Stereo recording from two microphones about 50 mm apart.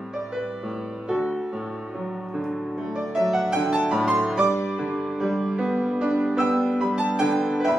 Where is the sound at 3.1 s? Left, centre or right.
Centre.